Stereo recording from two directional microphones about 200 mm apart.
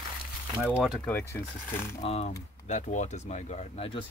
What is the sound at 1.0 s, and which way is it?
Speech, 10° left (ahead or behind).